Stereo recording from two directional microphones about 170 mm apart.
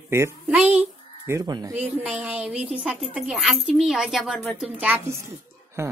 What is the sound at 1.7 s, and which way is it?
A woman's voice, 10° right (ahead or behind).